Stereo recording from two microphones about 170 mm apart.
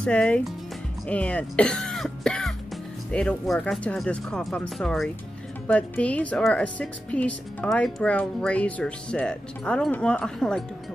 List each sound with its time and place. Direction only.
0.0 s a woman's voice: 5° left (ahead or behind)